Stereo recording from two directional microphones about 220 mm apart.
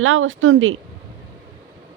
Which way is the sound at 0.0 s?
65° right (ahead or behind).